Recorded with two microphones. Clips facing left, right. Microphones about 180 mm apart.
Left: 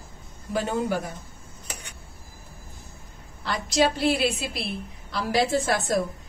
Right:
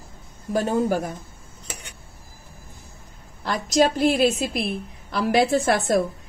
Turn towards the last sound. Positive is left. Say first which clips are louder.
# right 4 dB
turn(degrees=-55)  # may be behind; listen again after turning